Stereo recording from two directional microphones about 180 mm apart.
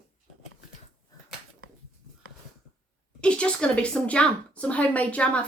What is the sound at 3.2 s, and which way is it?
Speech, 5° left (ahead or behind).